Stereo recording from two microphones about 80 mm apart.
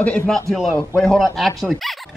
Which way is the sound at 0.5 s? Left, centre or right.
Centre.